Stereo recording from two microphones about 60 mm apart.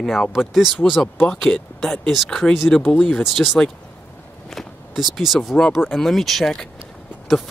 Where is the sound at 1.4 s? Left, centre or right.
Centre.